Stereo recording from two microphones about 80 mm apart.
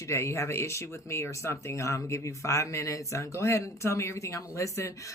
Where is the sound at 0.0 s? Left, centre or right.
Left.